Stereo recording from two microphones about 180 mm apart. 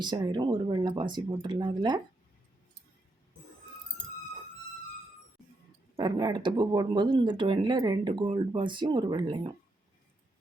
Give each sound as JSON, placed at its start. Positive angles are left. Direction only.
{"t": 0.0, "sound": "speech", "side_deg": -25}
{"t": 6.0, "sound": "speech", "side_deg": -25}